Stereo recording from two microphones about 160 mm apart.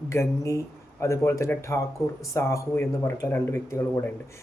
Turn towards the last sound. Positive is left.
turn(degrees=15)  # may be behind; listen again after turning